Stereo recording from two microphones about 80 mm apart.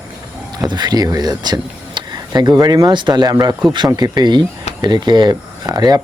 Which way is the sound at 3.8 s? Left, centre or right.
Right.